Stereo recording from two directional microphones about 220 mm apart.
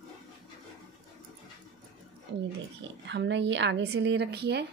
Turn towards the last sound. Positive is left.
turn(degrees=-50)  # may be behind; listen again after turning